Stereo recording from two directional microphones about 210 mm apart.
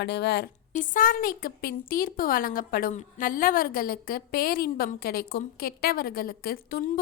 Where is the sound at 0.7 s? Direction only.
40° left (ahead or behind).